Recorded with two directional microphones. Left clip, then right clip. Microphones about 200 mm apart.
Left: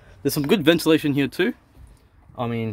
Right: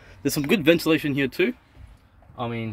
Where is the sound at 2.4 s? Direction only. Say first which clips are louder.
Left 3 dB; 40° left (ahead or behind).